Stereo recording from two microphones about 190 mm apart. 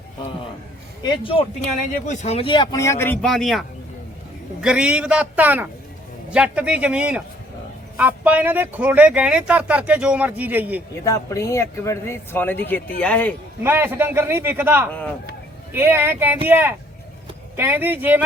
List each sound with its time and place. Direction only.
1.0 s speech: 25° left (ahead or behind); by 3.6 s centre (ahead or behind)
4.6 s a man's voice: 5° right (ahead or behind)
11.0 s speech: 15° left (ahead or behind)
13.6 s speech: 10° right (ahead or behind)